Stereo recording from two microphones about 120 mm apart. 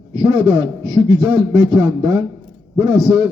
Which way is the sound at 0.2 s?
30° right (ahead or behind).